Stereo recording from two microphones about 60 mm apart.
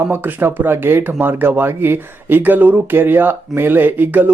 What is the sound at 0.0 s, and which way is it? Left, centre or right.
Speech, right.